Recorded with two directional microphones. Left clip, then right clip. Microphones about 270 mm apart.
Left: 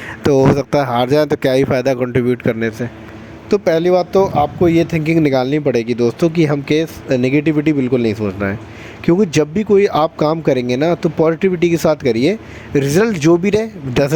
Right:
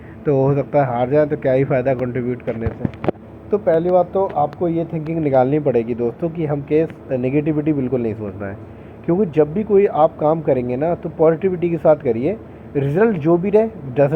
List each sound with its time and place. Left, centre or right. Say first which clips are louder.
0.5 s speech: left 2 dB; left